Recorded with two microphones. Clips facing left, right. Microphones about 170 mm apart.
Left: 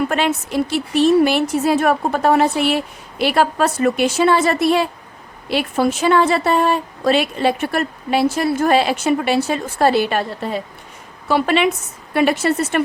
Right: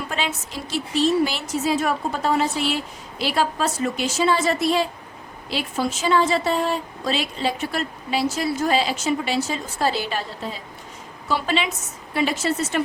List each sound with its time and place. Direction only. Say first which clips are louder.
0.1 s a woman's voice: left 9 dB; 60° left (ahead or behind)